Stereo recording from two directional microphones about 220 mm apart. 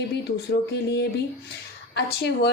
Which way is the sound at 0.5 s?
45° left (ahead or behind).